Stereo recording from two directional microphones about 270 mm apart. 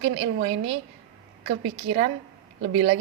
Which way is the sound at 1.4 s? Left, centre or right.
Right.